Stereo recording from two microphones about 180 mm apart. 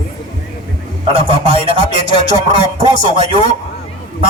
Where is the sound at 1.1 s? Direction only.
30° right (ahead or behind).